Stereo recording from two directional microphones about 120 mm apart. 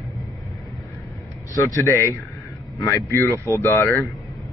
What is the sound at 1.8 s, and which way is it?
Speech, 20° left (ahead or behind).